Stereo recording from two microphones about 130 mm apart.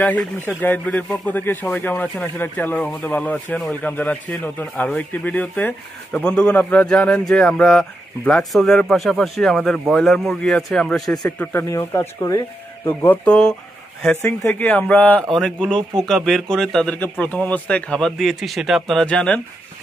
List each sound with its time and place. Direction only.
0.0 s speech: 10° left (ahead or behind)